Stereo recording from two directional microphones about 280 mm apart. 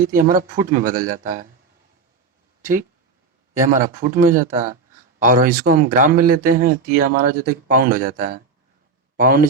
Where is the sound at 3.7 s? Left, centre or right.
Right.